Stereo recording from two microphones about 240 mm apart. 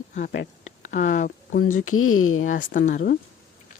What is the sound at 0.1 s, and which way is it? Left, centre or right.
Speech, left.